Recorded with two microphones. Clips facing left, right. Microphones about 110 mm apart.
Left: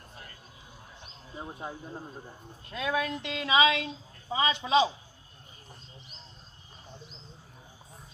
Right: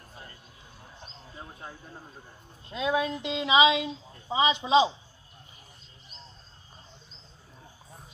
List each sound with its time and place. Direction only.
1.3 s speech: 20° left (ahead or behind)
2.7 s speech: 20° right (ahead or behind)